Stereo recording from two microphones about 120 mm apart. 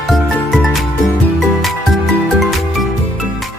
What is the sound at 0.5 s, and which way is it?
Music, centre (ahead or behind).